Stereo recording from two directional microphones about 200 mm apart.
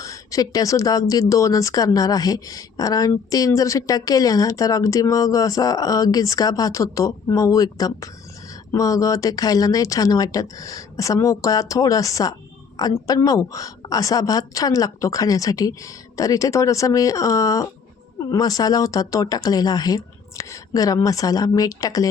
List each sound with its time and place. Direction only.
0.0 s a woman's voice: 15° left (ahead or behind)